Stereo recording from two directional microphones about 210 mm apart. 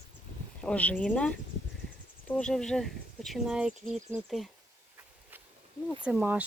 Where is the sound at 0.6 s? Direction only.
5° left (ahead or behind).